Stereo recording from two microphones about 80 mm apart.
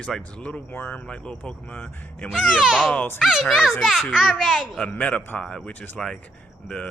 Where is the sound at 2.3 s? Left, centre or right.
Centre.